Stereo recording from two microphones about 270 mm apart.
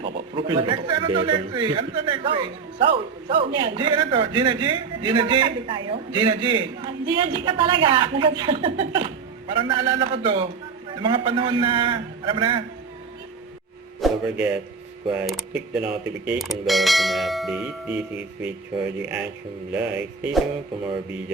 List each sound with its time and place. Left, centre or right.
0.3 s a man's voice: centre
14.0 s speech: centre